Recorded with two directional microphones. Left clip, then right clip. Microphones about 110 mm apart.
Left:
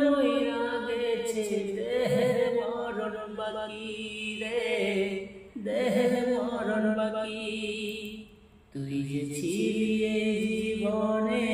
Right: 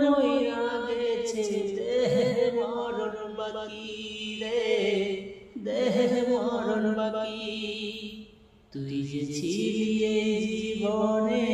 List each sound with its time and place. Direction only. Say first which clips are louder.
0.0 s a capella: right 1 dB; 30° right (ahead or behind)
4.4 s music: right 3 dB; 30° right (ahead or behind)
8.9 s music: right 1 dB; 40° right (ahead or behind)